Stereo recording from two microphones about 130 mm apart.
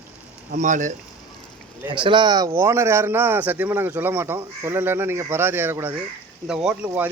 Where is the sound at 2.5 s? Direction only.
20° right (ahead or behind).